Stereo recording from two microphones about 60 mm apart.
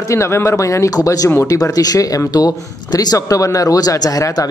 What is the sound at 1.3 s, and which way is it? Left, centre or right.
Speech, left.